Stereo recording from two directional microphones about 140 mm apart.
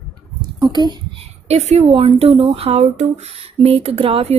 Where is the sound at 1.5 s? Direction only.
50° right (ahead or behind).